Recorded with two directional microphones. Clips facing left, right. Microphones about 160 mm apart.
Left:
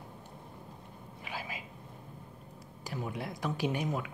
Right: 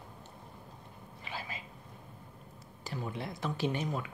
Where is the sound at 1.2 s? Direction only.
10° left (ahead or behind).